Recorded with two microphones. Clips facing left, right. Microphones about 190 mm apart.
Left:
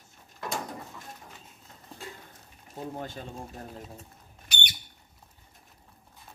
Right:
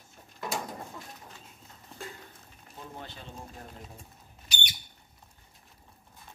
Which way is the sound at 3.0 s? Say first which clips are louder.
Left 7 dB; 45° left (ahead or behind).